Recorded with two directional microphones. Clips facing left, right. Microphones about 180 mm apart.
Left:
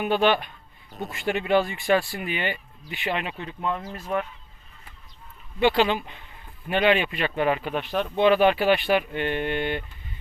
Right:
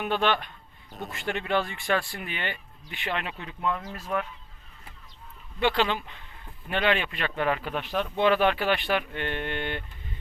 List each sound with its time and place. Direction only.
0.0 s a man's voice: 10° left (ahead or behind)
3.9 s speech: 20° left (ahead or behind)
5.5 s a man's voice: 5° left (ahead or behind)